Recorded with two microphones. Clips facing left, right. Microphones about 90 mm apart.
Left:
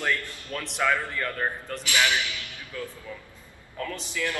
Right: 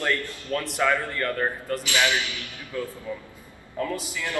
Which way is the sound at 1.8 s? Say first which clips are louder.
Even; 20° right (ahead or behind).